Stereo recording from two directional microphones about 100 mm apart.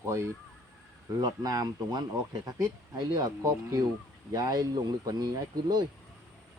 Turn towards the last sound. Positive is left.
turn(degrees=-40)  # may be behind; listen again after turning